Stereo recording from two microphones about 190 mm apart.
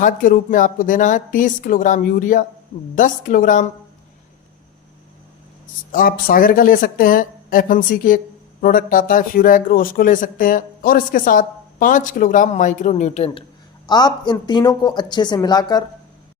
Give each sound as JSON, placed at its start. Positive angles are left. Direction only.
{"t": 0.0, "sound": "speech", "side_deg": 45}
{"t": 5.9, "sound": "speech", "side_deg": 50}
{"t": 13.8, "sound": "a woman's voice", "side_deg": 20}